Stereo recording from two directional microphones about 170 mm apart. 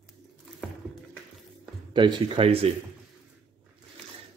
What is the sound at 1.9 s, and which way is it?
Speech, 25° right (ahead or behind).